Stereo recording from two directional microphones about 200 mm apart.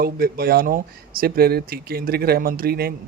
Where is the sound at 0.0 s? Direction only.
50° right (ahead or behind).